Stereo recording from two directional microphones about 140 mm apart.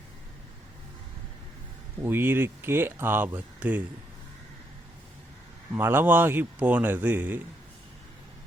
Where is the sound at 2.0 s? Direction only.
15° right (ahead or behind).